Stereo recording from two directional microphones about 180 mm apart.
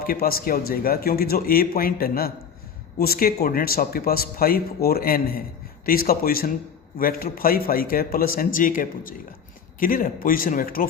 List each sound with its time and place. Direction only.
0.0 s speech: 55° left (ahead or behind)